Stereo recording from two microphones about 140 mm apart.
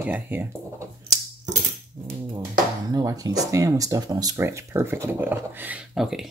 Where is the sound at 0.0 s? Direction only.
10° right (ahead or behind).